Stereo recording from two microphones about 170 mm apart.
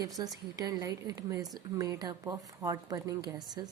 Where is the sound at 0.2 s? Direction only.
20° right (ahead or behind).